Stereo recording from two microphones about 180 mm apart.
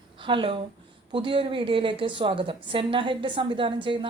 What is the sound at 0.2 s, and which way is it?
A woman's voice, 30° right (ahead or behind).